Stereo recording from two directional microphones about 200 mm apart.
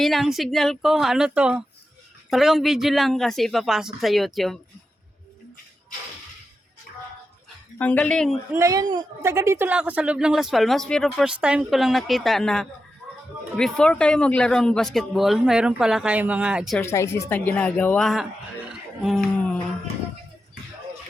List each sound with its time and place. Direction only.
0.0 s a woman's voice: centre (ahead or behind)
6.9 s music: 45° left (ahead or behind)
7.8 s a woman's voice: 5° left (ahead or behind)
8.5 s a woman's voice: 15° right (ahead or behind)
16.7 s speech: 15° left (ahead or behind)